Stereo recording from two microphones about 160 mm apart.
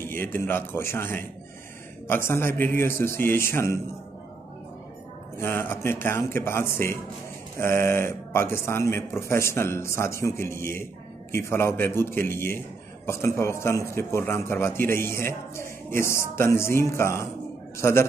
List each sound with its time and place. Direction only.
0.0 s speech: 15° left (ahead or behind)
5.4 s speech: 15° left (ahead or behind)